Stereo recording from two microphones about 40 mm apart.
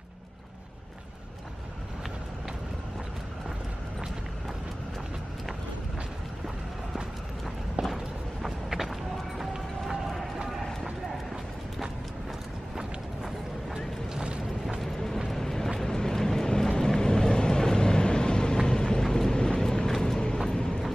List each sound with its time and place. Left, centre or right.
7.8 s a sound: centre
10.5 s clip-clop: centre
13.7 s boat: right
14.8 s vehicle: centre